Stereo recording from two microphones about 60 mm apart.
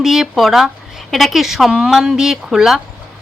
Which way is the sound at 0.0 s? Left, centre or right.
Centre.